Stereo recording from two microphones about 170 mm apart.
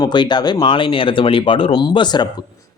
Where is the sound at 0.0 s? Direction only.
25° left (ahead or behind).